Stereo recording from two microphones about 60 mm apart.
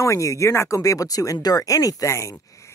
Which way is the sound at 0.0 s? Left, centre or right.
Left.